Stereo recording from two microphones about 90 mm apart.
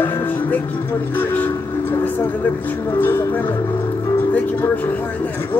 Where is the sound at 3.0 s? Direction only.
25° left (ahead or behind).